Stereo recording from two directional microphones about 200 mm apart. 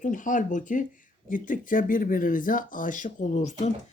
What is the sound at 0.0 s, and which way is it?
Speech, 40° left (ahead or behind).